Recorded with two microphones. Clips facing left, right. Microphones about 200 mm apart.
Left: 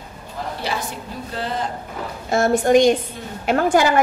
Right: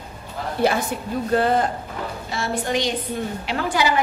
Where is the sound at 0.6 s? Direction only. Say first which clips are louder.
Right 10 dB; 50° right (ahead or behind).